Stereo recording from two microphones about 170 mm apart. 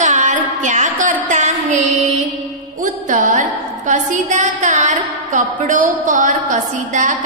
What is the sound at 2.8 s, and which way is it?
A woman's voice, 50° right (ahead or behind).